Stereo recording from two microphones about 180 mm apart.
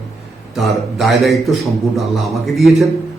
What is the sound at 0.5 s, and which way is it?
A man's voice, centre (ahead or behind).